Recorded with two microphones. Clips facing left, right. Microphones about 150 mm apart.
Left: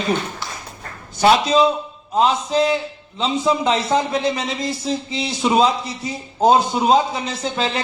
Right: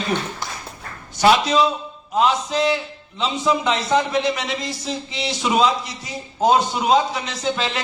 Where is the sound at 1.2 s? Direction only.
30° left (ahead or behind).